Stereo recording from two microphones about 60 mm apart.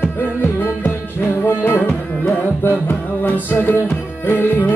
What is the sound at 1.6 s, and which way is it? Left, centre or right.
Tabla, left.